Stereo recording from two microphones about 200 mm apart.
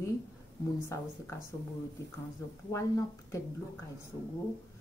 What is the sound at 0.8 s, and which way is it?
Speech, 15° left (ahead or behind).